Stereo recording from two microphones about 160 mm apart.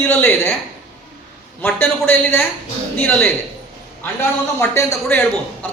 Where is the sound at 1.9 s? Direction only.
10° left (ahead or behind).